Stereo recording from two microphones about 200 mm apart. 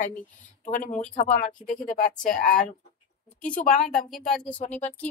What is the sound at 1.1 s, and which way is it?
Speech, 40° left (ahead or behind).